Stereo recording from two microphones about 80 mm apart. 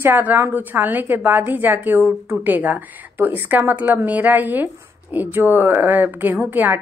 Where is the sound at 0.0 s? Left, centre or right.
Right.